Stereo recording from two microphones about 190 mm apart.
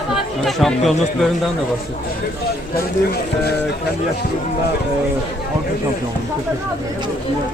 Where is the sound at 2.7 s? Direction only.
55° left (ahead or behind).